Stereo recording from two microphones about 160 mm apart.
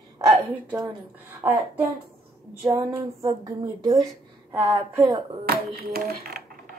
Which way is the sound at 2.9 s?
15° right (ahead or behind).